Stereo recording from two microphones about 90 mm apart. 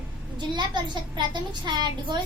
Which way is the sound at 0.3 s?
55° right (ahead or behind).